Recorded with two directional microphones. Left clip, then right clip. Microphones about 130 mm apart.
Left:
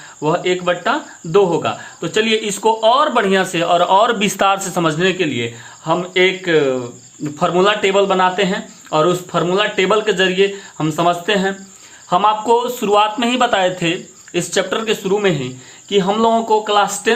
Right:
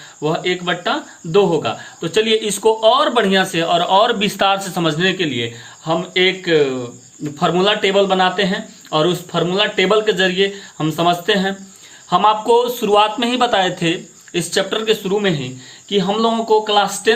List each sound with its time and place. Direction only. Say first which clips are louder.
0.2 s speech: left 2 dB; 35° left (ahead or behind)
12.1 s a man's voice: right 1 dB; 25° left (ahead or behind)
14.3 s speech: left 1 dB; 30° left (ahead or behind)